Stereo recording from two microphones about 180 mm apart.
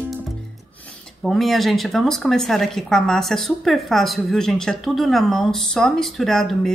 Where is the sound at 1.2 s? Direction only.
Centre (ahead or behind).